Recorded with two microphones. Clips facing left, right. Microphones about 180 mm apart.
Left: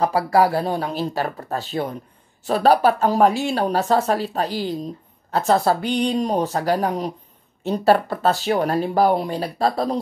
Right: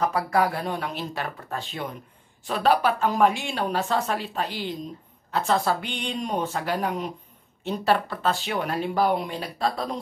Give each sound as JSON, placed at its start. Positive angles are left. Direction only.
{"t": 0.0, "sound": "speech", "side_deg": 35}